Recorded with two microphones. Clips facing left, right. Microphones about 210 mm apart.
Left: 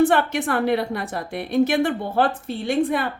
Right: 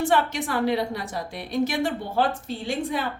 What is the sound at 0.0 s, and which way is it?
Speech, 60° left (ahead or behind).